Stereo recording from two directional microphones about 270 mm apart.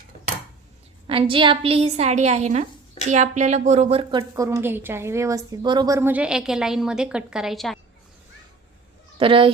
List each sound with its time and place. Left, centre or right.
1.0 s a woman's voice: centre
9.1 s speech: centre